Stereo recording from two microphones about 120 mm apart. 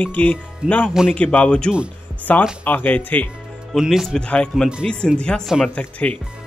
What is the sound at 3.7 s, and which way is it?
Speech, 5° right (ahead or behind).